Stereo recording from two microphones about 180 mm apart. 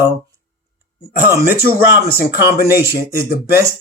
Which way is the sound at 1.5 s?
15° right (ahead or behind).